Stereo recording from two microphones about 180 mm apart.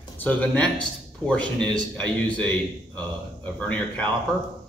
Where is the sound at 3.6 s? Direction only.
10° left (ahead or behind).